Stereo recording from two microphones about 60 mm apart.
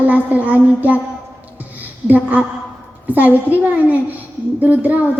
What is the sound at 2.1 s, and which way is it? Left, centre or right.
Speech, right.